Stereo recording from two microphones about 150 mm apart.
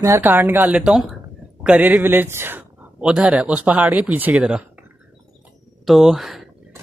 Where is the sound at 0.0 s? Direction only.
15° right (ahead or behind).